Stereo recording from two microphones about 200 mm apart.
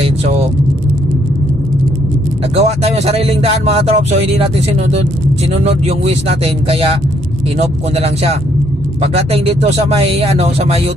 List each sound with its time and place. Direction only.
2.5 s speech: 30° right (ahead or behind)
9.0 s speech: 30° right (ahead or behind)